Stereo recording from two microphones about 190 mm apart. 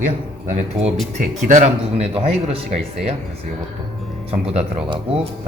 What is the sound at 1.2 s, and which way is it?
Speech, 45° right (ahead or behind).